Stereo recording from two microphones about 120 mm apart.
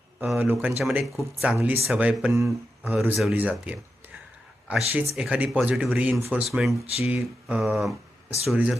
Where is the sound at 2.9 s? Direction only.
5° right (ahead or behind).